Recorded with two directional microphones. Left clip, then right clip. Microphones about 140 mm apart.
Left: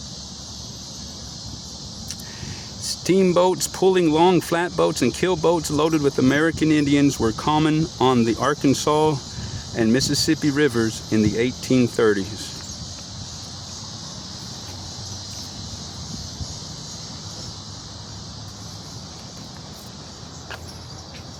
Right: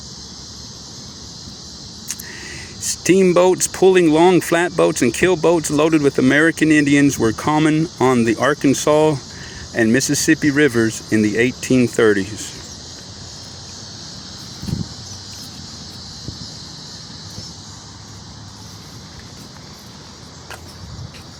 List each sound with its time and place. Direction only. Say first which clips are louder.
2.8 s a sound: right 5 dB; 20° right (ahead or behind)
3.3 s speech: right 4 dB; 20° right (ahead or behind)
4.0 s speech: right 4 dB; 5° right (ahead or behind)
7.5 s speech: right 4 dB; 5° right (ahead or behind)